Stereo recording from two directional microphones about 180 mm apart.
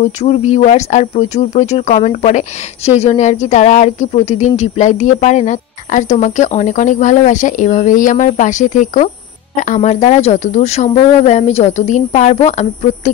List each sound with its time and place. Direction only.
0.2 s speech: 40° left (ahead or behind)